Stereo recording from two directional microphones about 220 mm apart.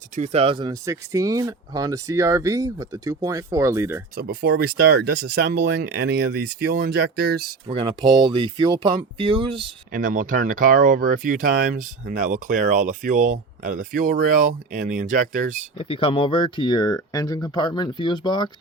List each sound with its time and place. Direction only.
0.2 s speech: 30° right (ahead or behind); by 4.0 s 10° right (ahead or behind)
4.1 s speech: 45° right (ahead or behind)
7.7 s speech: 25° right (ahead or behind)
9.9 s speech: 40° right (ahead or behind)
15.8 s speech: 25° left (ahead or behind)